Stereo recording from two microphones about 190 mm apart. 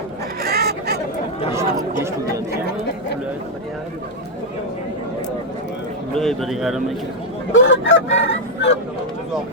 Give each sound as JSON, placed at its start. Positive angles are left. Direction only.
{"t": 0.4, "sound": "a sound", "side_deg": -55}
{"t": 6.1, "sound": "a man's voice", "side_deg": 0}
{"t": 7.5, "sound": "fowl", "side_deg": 75}